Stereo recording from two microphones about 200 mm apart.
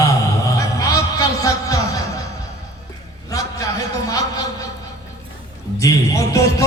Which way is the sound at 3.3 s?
15° left (ahead or behind).